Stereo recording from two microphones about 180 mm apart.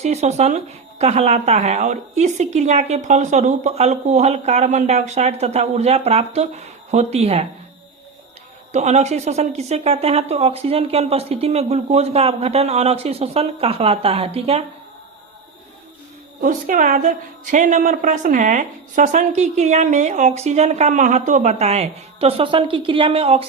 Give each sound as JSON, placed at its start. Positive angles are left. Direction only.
{"t": 0.0, "sound": "speech", "side_deg": -40}
{"t": 8.7, "sound": "speech", "side_deg": -40}
{"t": 16.4, "sound": "a woman's voice", "side_deg": -45}